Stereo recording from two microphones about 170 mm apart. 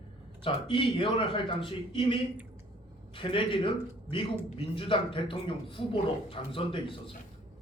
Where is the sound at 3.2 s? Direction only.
30° left (ahead or behind).